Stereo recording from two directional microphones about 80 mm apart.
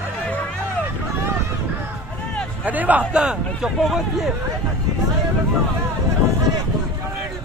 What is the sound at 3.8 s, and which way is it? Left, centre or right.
Speech, centre.